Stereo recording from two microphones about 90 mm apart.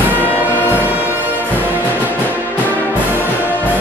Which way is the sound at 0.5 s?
20° left (ahead or behind).